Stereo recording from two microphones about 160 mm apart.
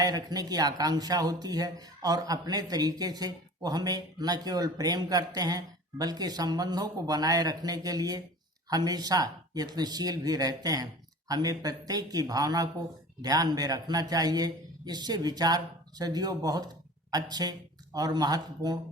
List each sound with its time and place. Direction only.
0.0 s speech: 25° right (ahead or behind)